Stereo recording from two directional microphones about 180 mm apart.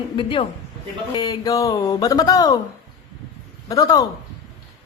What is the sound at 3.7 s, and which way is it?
Speech, 20° left (ahead or behind).